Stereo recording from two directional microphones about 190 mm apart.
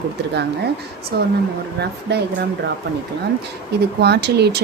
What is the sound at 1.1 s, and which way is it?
Speech, 55° right (ahead or behind).